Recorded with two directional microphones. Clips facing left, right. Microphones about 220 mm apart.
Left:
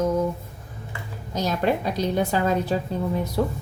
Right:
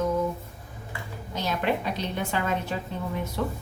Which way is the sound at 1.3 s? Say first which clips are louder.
Left 4 dB; 40° left (ahead or behind).